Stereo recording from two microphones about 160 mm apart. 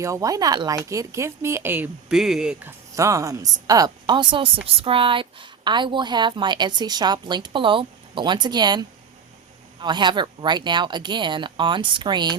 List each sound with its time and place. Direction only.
0.0 s speech: 20° right (ahead or behind); by 2.7 s 5° right (ahead or behind)
2.9 s speech: 20° right (ahead or behind)